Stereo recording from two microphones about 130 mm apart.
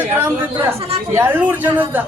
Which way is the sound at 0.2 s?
15° right (ahead or behind).